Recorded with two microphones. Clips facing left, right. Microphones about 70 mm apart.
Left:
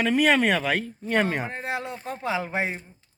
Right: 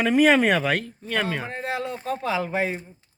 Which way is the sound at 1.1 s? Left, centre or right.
Centre.